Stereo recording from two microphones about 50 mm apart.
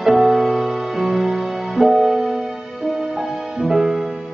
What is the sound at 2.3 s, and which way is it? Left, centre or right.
Music, right.